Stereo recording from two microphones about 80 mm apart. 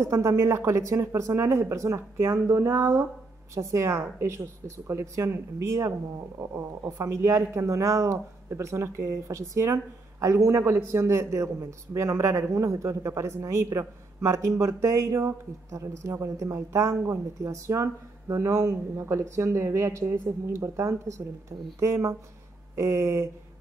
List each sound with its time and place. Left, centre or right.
0.0 s a man's voice: right